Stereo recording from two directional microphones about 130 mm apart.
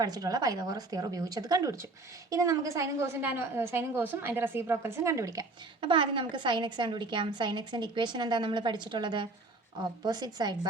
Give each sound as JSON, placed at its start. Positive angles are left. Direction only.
{"t": 0.0, "sound": "a woman's voice", "side_deg": -30}
{"t": 5.8, "sound": "a woman's voice", "side_deg": -40}